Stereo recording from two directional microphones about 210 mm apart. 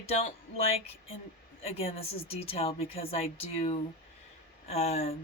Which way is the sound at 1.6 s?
30° left (ahead or behind).